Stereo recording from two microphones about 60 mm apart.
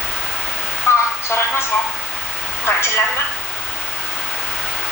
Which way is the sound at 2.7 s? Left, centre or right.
Left.